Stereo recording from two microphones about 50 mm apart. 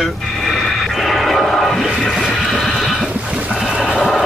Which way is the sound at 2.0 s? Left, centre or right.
Centre.